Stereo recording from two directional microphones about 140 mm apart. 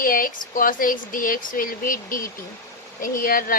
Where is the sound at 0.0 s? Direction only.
90° left.